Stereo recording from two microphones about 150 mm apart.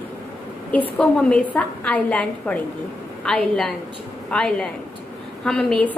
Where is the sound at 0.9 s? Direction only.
5° left (ahead or behind).